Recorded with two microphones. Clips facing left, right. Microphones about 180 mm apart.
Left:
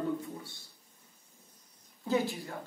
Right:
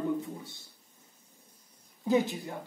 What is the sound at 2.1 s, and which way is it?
Speech, 20° right (ahead or behind).